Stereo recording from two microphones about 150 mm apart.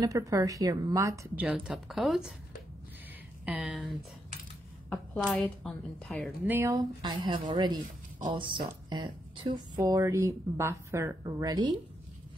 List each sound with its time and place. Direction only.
0.0 s a woman's voice: 20° right (ahead or behind)
1.3 s speech: 10° right (ahead or behind)
3.4 s speech: 5° right (ahead or behind)
4.9 s speech: centre (ahead or behind)
6.4 s a woman's voice: 15° right (ahead or behind)